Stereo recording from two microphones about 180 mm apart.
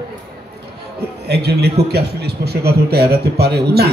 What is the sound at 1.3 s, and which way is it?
A man's voice, 65° right (ahead or behind).